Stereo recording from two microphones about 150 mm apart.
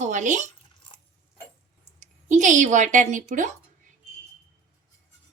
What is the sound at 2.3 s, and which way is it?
Speech, 55° right (ahead or behind).